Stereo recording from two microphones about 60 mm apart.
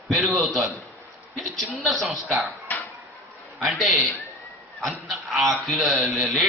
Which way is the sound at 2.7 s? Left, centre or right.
Left.